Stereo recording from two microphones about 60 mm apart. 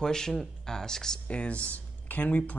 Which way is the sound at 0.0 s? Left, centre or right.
Centre.